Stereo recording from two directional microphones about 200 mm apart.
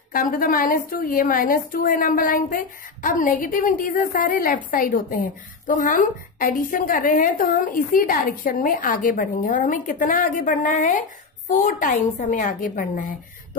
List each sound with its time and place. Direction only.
0.1 s a woman's voice: 45° left (ahead or behind)